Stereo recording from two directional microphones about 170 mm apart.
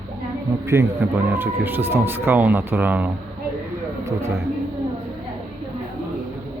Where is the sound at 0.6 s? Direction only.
15° right (ahead or behind).